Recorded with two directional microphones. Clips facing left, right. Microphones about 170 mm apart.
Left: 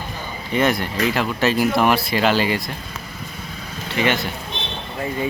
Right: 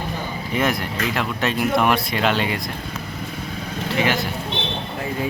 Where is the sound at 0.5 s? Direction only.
Centre (ahead or behind).